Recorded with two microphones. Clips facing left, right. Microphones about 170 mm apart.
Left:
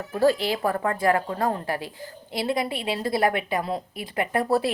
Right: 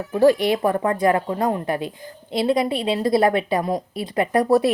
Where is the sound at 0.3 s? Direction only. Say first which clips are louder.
Right 5 dB; 20° right (ahead or behind).